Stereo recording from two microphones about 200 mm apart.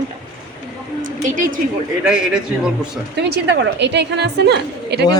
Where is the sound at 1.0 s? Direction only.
40° right (ahead or behind).